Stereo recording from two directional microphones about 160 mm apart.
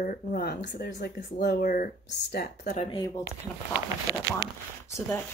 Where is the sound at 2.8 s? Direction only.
25° left (ahead or behind).